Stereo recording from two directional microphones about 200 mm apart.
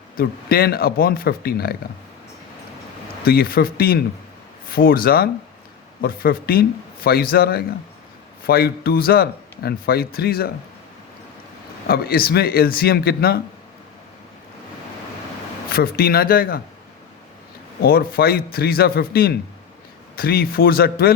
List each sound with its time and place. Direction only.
0.2 s speech: 50° left (ahead or behind)
3.2 s speech: 50° left (ahead or behind)
11.9 s speech: 50° left (ahead or behind)
15.7 s speech: 50° left (ahead or behind)
17.8 s speech: 50° left (ahead or behind)